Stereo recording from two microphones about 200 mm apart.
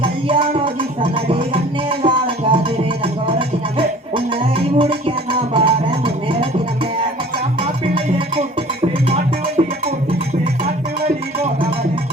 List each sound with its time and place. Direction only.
0.0 s music: 25° right (ahead or behind)
9.6 s music: 30° right (ahead or behind)